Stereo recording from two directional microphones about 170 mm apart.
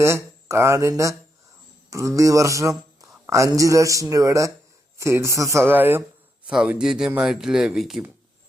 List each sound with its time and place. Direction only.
0.0 s a man's voice: 15° right (ahead or behind)